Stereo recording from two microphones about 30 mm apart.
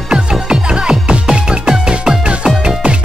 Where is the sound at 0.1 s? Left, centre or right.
Right.